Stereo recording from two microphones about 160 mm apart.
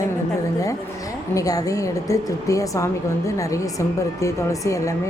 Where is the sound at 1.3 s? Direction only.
20° left (ahead or behind).